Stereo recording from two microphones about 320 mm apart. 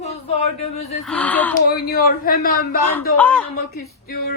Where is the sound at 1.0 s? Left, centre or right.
Centre.